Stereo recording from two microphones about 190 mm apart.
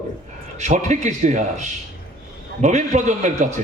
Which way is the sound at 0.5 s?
40° right (ahead or behind).